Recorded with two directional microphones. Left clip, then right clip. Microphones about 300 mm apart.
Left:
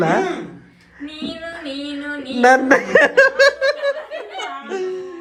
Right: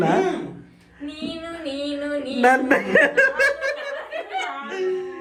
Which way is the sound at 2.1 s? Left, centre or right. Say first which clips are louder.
Left 5 dB; centre.